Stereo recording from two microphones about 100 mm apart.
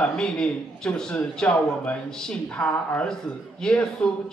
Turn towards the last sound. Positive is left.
turn(degrees=10)  # may be behind; listen again after turning